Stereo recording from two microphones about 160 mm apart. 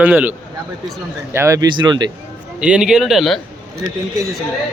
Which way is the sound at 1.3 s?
20° right (ahead or behind).